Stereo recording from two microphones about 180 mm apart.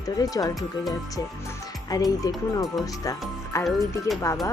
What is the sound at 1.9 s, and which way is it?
Speech, 20° left (ahead or behind).